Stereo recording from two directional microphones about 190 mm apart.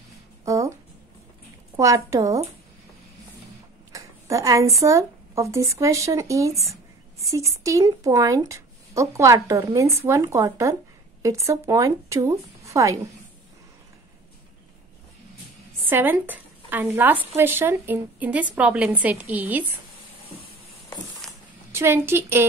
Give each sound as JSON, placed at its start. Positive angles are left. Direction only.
{"t": 0.5, "sound": "a sound", "side_deg": -15}
{"t": 1.8, "sound": "speech", "side_deg": -15}
{"t": 3.9, "sound": "speech", "side_deg": -15}
{"t": 15.9, "sound": "a woman's voice", "side_deg": -10}
{"t": 21.7, "sound": "speech", "side_deg": -15}